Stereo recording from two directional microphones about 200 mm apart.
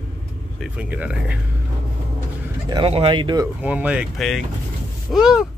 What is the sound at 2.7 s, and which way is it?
Speech, 25° right (ahead or behind).